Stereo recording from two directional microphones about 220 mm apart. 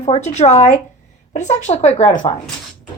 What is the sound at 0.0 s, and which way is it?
Speech, 30° left (ahead or behind).